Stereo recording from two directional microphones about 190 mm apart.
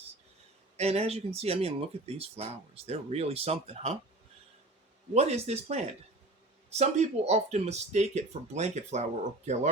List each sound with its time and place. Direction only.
0.8 s speech: 35° right (ahead or behind)
5.1 s speech: 35° right (ahead or behind)